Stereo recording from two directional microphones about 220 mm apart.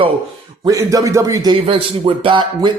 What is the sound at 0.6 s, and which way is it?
A man's voice, 15° right (ahead or behind).